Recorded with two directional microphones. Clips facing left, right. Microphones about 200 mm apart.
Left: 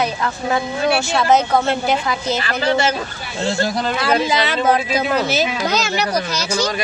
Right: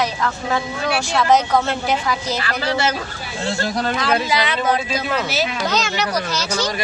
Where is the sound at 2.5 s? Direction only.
20° left (ahead or behind).